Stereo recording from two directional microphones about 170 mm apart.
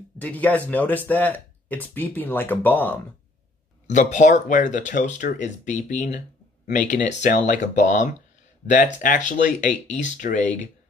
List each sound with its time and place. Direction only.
0.2 s speech: 10° left (ahead or behind)
3.8 s speech: 45° left (ahead or behind)